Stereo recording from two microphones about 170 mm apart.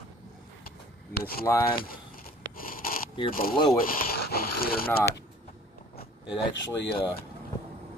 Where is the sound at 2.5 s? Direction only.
55° left (ahead or behind).